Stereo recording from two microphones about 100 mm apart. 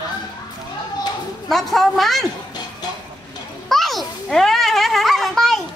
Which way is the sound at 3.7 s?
Centre (ahead or behind).